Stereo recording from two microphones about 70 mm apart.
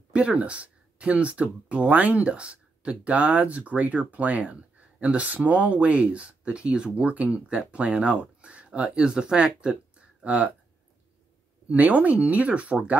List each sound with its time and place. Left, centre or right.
0.1 s speech: centre
11.7 s speech: right